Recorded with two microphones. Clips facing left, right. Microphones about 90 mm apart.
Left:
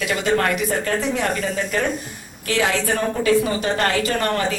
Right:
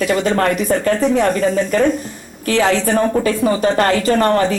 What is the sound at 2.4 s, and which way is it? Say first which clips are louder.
Speech: right 5 dB; 35° right (ahead or behind).